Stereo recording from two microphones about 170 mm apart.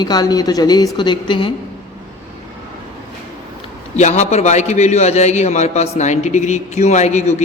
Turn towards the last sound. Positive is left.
turn(degrees=40)  # may be behind; listen again after turning